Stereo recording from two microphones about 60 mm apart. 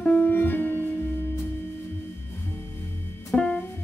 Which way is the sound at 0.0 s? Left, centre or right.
Left.